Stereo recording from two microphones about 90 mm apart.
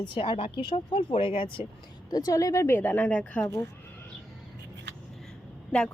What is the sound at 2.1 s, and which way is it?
A woman's voice, 40° left (ahead or behind).